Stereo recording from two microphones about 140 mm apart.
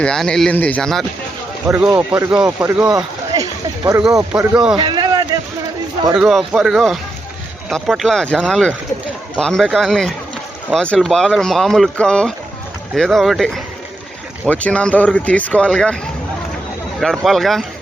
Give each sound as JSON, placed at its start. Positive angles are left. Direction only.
{"t": 0.0, "sound": "speech", "side_deg": 5}
{"t": 1.6, "sound": "speech", "side_deg": -10}
{"t": 4.3, "sound": "speech", "side_deg": -5}
{"t": 4.8, "sound": "a sound", "side_deg": -30}
{"t": 6.1, "sound": "speech", "side_deg": -5}
{"t": 17.0, "sound": "speech", "side_deg": 0}